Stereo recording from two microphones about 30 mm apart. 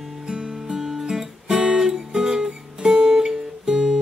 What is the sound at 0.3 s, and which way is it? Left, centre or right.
Music, right.